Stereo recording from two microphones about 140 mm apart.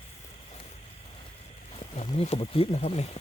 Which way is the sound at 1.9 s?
50° left (ahead or behind).